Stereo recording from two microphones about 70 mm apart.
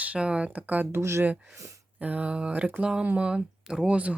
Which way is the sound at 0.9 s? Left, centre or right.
Right.